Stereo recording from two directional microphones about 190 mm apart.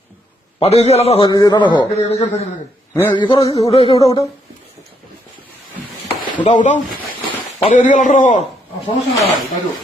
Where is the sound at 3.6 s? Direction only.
30° left (ahead or behind).